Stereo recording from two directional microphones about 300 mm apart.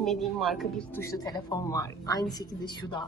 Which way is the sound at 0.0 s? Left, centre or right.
Centre.